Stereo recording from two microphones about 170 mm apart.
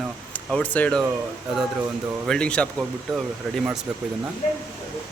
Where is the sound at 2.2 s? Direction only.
5° left (ahead or behind).